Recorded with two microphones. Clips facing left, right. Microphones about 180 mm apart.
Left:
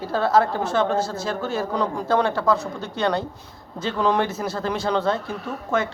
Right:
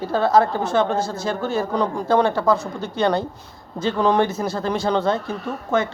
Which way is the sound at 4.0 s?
30° right (ahead or behind).